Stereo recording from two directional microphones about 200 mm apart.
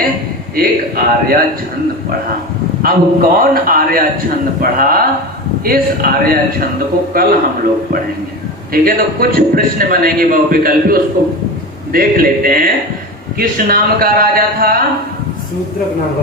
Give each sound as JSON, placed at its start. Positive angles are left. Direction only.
{"t": 0.5, "sound": "a man's voice", "side_deg": -45}
{"t": 2.8, "sound": "a man's voice", "side_deg": -45}
{"t": 8.7, "sound": "a man's voice", "side_deg": -45}